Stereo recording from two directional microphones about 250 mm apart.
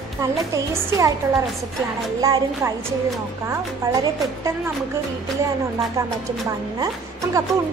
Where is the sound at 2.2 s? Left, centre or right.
Centre.